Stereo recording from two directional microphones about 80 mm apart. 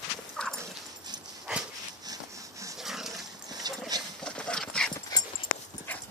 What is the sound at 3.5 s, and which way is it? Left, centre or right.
Clip-clop, right.